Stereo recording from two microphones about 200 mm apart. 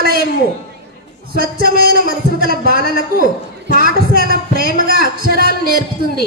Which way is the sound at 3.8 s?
45° right (ahead or behind).